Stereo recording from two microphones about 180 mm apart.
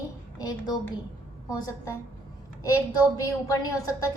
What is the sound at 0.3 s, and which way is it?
A woman's voice, 20° left (ahead or behind).